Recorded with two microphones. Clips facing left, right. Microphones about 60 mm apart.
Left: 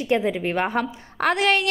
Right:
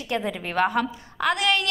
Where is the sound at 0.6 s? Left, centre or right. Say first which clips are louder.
Right 1 dB; left.